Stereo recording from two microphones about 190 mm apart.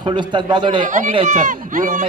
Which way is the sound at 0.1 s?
25° right (ahead or behind).